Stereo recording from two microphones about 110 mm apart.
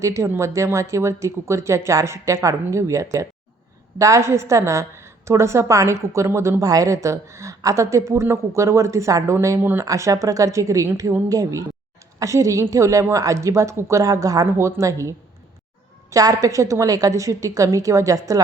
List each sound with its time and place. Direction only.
0.0 s a woman's voice: 30° right (ahead or behind)